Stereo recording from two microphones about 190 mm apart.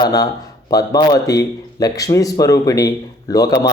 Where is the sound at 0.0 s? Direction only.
20° left (ahead or behind).